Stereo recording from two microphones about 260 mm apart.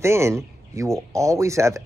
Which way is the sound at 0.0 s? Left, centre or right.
Centre.